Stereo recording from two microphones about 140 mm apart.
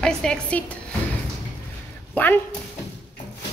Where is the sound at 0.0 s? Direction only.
5° left (ahead or behind).